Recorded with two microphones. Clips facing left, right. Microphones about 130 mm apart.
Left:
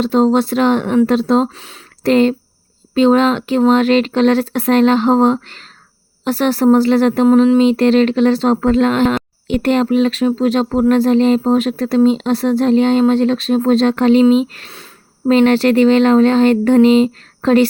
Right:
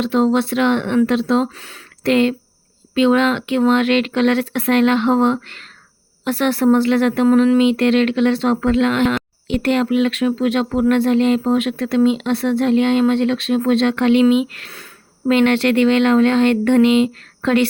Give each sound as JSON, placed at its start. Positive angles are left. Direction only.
{"t": 0.0, "sound": "speech", "side_deg": 35}
{"t": 1.5, "sound": "speech", "side_deg": 25}
{"t": 2.0, "sound": "speech", "side_deg": 35}